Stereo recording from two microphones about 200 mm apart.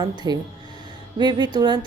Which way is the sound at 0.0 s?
20° right (ahead or behind).